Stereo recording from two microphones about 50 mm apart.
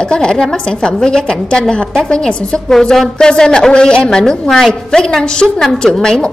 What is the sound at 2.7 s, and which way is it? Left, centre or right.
A woman's voice, centre.